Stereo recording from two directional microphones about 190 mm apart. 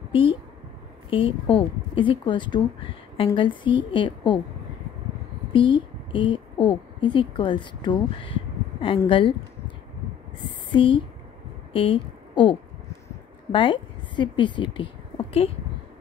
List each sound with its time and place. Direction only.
0.1 s a woman's voice: 25° left (ahead or behind)
5.5 s a woman's voice: 25° left (ahead or behind)
10.7 s a woman's voice: 25° left (ahead or behind)